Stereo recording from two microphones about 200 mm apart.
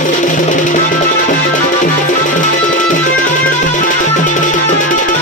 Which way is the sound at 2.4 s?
40° left (ahead or behind).